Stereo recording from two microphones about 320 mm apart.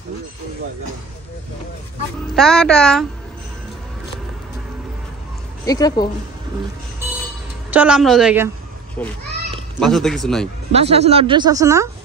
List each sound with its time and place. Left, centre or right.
2.3 s a woman's voice: centre
5.7 s speech: centre
7.7 s a woman's voice: centre
9.8 s a woman's voice: centre
10.7 s speech: centre